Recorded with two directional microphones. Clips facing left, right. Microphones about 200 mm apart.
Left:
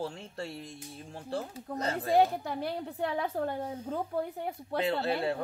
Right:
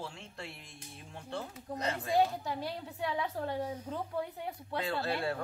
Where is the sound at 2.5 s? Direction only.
60° left (ahead or behind).